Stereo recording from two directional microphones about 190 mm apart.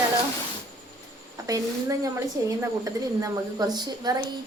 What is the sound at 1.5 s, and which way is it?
A woman's voice, 15° right (ahead or behind).